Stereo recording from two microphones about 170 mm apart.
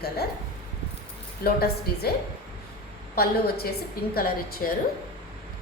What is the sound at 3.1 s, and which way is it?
A woman's voice, 65° left (ahead or behind).